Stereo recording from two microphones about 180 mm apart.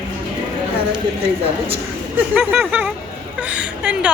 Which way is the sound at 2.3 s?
10° right (ahead or behind).